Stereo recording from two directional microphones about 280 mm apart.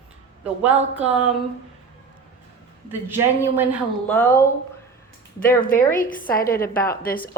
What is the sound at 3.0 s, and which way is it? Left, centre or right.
Speech, centre.